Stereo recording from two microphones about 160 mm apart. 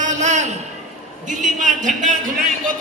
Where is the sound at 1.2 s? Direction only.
50° right (ahead or behind).